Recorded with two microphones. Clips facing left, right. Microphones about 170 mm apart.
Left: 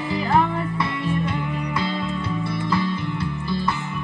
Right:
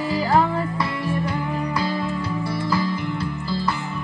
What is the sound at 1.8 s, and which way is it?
Music, 25° left (ahead or behind).